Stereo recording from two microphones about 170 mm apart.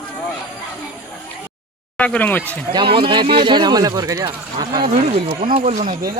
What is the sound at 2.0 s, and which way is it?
Speech, 10° left (ahead or behind).